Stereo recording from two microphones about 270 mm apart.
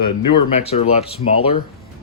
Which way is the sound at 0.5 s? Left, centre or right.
Left.